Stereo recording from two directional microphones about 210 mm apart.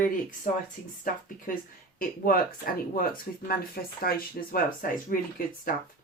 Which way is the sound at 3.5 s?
45° left (ahead or behind).